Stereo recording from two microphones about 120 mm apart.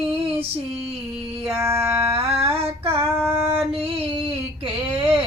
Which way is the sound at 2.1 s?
55° right (ahead or behind).